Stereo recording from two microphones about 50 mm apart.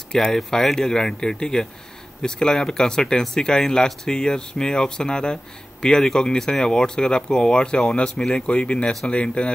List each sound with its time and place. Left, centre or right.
0.1 s speech: centre